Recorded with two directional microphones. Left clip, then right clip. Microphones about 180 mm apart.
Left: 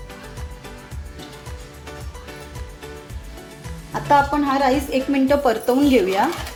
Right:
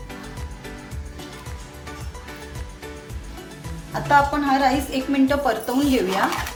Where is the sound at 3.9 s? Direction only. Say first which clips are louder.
Left 1 dB; 35° left (ahead or behind).